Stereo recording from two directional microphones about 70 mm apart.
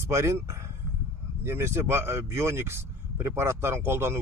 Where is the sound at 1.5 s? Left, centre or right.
Right.